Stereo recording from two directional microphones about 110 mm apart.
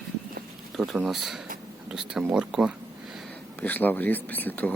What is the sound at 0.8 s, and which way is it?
Speech, centre (ahead or behind).